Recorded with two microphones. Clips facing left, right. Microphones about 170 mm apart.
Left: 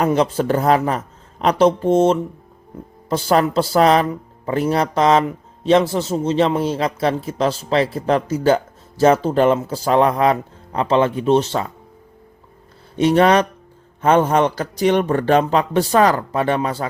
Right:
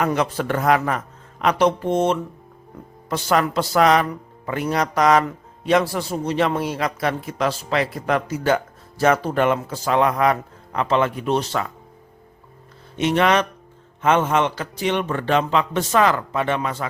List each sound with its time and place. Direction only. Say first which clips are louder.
0.0 s speech: left 4 dB; 30° left (ahead or behind)
13.0 s a man's voice: left 5 dB; 35° left (ahead or behind)